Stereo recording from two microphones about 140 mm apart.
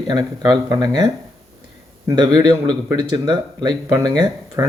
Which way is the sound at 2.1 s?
30° right (ahead or behind).